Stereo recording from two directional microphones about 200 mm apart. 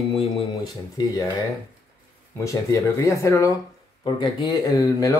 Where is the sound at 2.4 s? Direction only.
15° left (ahead or behind).